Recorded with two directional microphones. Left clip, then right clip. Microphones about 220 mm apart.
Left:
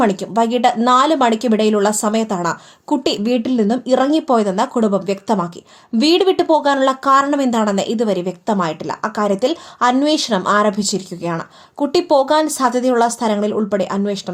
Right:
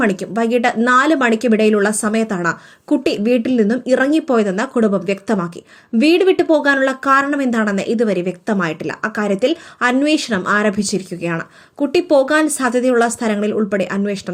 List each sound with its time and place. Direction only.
0.0 s speech: 5° right (ahead or behind)